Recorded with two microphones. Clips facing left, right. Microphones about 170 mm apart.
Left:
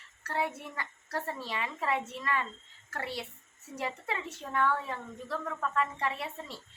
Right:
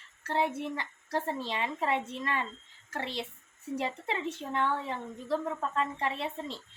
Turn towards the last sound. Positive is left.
turn(degrees=-25)  # may be behind; listen again after turning